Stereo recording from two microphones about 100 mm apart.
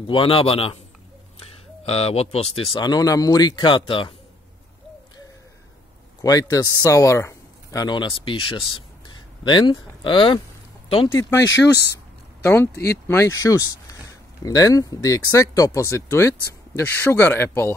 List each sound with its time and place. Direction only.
0.0 s a man's voice: 65° left (ahead or behind)
1.9 s speech: 90° left
2.8 s speech: 45° left (ahead or behind); by 4.1 s 60° left (ahead or behind)
6.2 s speech: 35° left (ahead or behind)
7.8 s speech: 50° left (ahead or behind)
11.1 s speech: 25° left (ahead or behind)